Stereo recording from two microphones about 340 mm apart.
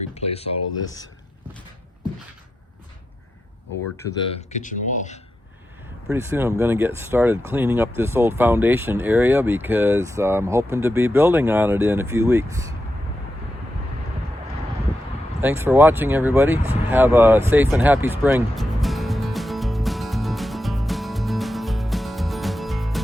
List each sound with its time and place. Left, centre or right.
0.1 s speech: centre
3.9 s speech: centre
6.1 s speech: centre
15.4 s a sound: centre